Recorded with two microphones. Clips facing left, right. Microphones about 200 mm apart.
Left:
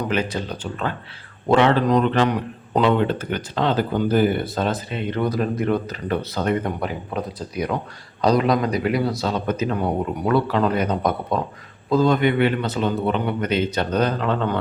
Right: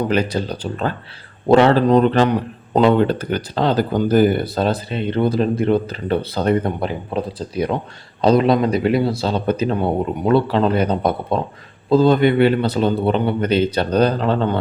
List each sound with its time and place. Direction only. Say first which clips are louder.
0.0 s speech: right 5 dB; 35° right (ahead or behind)